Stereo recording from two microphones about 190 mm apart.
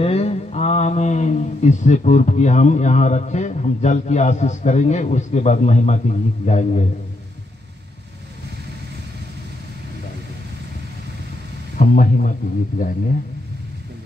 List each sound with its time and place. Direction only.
0.0 s speech: 35° left (ahead or behind)
11.8 s speech: 45° left (ahead or behind)